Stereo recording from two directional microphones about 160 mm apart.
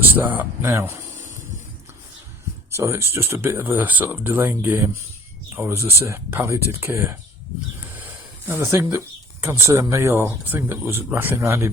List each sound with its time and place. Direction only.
0.0 s speech: 10° right (ahead or behind)
2.7 s speech: 15° right (ahead or behind)